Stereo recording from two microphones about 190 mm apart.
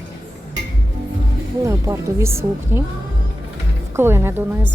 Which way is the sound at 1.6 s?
15° right (ahead or behind).